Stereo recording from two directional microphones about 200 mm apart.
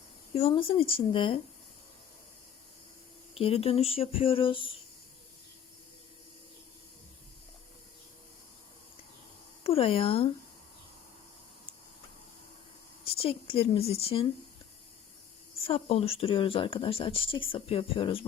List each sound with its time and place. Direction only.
0.3 s speech: 30° left (ahead or behind)
3.3 s speech: 30° left (ahead or behind)
9.6 s speech: 30° left (ahead or behind)
13.1 s speech: 30° left (ahead or behind)
15.6 s speech: 30° left (ahead or behind)